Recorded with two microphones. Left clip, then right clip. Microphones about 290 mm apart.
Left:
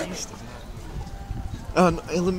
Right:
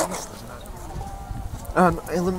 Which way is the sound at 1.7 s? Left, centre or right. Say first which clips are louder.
Right 1 dB; centre.